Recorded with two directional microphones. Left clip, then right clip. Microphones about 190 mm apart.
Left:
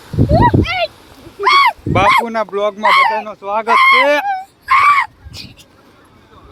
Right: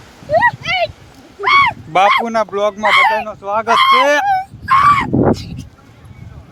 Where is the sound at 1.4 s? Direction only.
45° left (ahead or behind).